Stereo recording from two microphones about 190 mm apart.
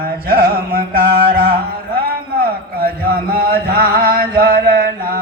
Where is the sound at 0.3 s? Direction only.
50° right (ahead or behind).